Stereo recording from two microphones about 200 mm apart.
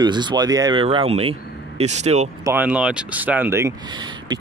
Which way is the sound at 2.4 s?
10° right (ahead or behind).